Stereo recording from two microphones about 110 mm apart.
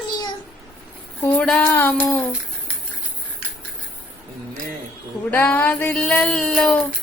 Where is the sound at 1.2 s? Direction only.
15° left (ahead or behind).